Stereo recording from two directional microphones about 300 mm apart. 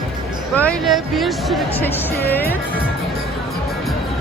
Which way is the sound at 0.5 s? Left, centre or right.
Centre.